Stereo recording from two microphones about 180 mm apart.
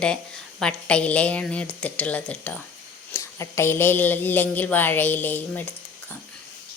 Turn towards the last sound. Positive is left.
turn(degrees=10)  # may be behind; listen again after turning